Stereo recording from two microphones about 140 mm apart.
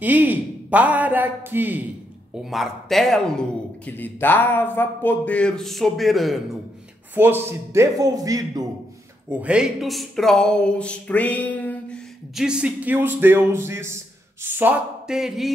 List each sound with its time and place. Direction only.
0.0 s speech: 10° right (ahead or behind)
2.4 s speech: centre (ahead or behind)
7.2 s speech: 15° right (ahead or behind)
9.4 s speech: 5° right (ahead or behind); by 12.0 s 10° left (ahead or behind)
12.4 s speech: 5° right (ahead or behind)